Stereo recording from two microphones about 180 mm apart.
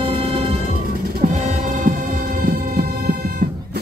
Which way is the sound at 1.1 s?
40° right (ahead or behind).